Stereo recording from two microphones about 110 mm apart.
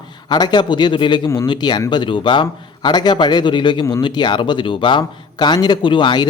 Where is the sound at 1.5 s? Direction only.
45° left (ahead or behind).